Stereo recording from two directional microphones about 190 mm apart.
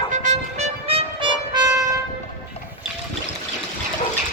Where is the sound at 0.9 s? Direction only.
30° right (ahead or behind).